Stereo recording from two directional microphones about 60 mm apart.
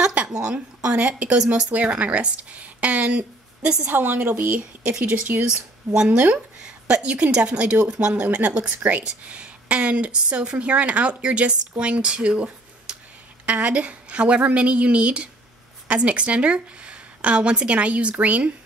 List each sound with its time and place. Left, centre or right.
0.0 s a woman's voice: centre
3.8 s a woman's voice: right